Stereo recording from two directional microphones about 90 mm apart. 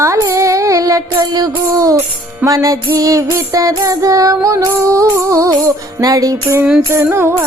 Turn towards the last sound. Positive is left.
turn(degrees=-30)  # may be behind; listen again after turning